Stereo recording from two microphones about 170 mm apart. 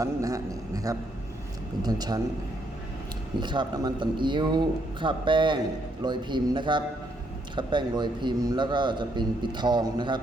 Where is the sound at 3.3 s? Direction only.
25° right (ahead or behind).